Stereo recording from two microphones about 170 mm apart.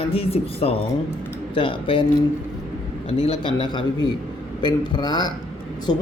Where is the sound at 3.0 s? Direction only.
35° left (ahead or behind).